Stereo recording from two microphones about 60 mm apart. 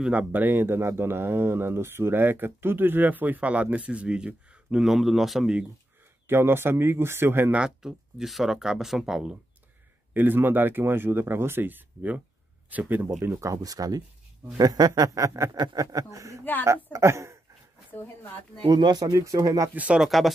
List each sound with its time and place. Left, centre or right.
0.3 s speech: right
4.8 s speech: centre
6.2 s speech: right
7.5 s speech: centre
10.1 s speech: right
13.3 s speech: right
15.6 s speech: right
16.6 s speech: right
17.9 s speech: left
18.9 s speech: right
19.7 s speech: right
20.0 s speech: centre